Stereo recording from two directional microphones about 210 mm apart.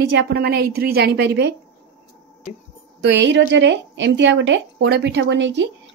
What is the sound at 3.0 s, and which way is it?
Speech, 55° right (ahead or behind).